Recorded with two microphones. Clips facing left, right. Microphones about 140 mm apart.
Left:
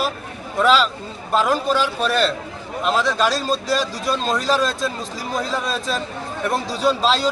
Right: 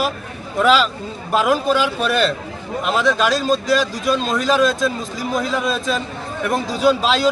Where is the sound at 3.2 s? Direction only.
35° left (ahead or behind).